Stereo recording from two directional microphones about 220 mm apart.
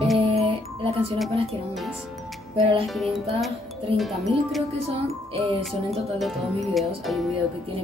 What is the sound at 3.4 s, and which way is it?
Speech, centre (ahead or behind).